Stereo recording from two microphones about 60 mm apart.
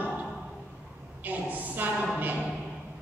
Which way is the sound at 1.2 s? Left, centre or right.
Right.